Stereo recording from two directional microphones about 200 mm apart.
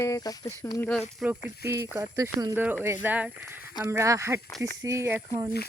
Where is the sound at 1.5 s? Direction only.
15° right (ahead or behind).